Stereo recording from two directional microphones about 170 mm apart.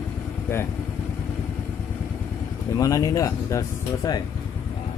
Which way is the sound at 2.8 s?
20° left (ahead or behind).